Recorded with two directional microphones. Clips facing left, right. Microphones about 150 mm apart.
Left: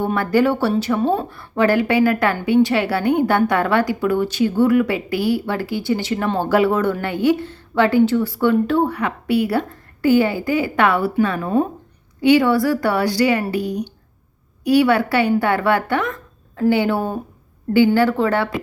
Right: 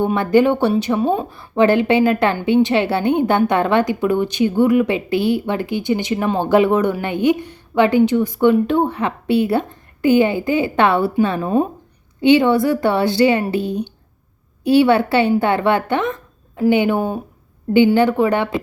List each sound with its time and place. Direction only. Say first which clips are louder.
0.0 s speech: right 3 dB; 20° right (ahead or behind)